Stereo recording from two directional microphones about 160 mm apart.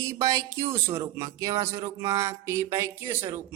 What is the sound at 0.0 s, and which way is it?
Music, 20° right (ahead or behind).